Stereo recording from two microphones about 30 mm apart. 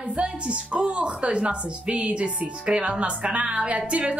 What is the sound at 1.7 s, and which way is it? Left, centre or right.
Music, right.